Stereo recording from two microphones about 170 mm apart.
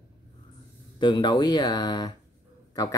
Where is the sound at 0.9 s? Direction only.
25° left (ahead or behind).